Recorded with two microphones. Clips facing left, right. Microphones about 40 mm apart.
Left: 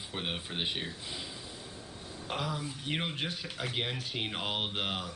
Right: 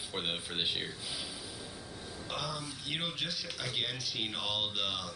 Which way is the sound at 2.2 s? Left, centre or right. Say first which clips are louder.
Left 3 dB; left.